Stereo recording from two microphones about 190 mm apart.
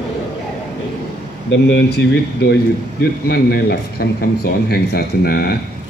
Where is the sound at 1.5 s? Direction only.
70° left (ahead or behind).